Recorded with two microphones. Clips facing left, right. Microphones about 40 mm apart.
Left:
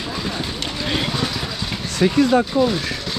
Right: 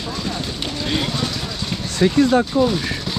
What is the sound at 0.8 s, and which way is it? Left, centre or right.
Vehicle, centre.